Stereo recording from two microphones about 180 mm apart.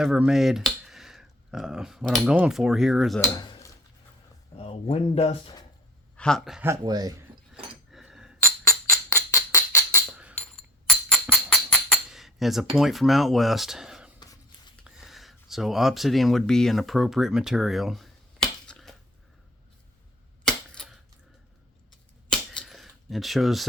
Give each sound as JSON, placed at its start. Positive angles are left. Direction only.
{"t": 0.0, "sound": "speech", "side_deg": -5}
{"t": 3.3, "sound": "dishes", "side_deg": 20}
{"t": 4.5, "sound": "speech", "side_deg": 35}
{"t": 6.1, "sound": "speech", "side_deg": 5}
{"t": 6.7, "sound": "speech", "side_deg": -20}
{"t": 7.7, "sound": "a sound", "side_deg": -5}
{"t": 9.0, "sound": "music", "side_deg": 15}
{"t": 10.8, "sound": "tambourine", "side_deg": 5}
{"t": 12.7, "sound": "speech", "side_deg": 0}
{"t": 18.7, "sound": "a sound", "side_deg": 0}
{"t": 20.5, "sound": "cap gun", "side_deg": 0}
{"t": 22.3, "sound": "cap gun", "side_deg": 0}